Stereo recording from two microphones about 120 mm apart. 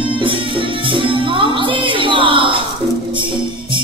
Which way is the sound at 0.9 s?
45° right (ahead or behind).